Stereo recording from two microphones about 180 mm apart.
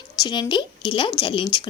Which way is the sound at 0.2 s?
25° left (ahead or behind).